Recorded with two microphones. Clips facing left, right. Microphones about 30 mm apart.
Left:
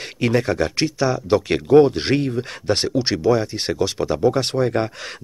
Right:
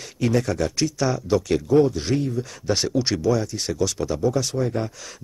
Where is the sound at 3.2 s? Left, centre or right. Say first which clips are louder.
Left 4 dB; left.